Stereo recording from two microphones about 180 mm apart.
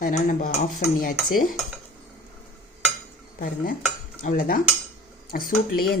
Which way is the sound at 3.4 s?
55° left (ahead or behind).